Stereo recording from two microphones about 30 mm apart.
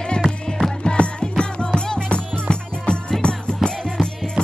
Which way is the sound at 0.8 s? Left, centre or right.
Left.